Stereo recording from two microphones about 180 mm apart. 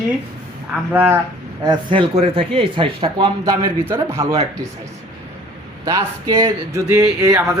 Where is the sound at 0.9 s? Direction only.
10° right (ahead or behind).